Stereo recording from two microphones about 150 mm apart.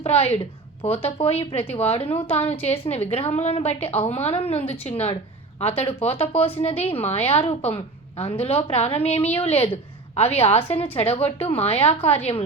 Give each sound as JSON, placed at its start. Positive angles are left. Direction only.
{"t": 0.0, "sound": "a woman's voice", "side_deg": 40}